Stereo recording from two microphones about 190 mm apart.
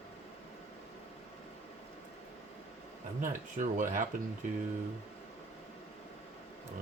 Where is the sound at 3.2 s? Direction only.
45° right (ahead or behind).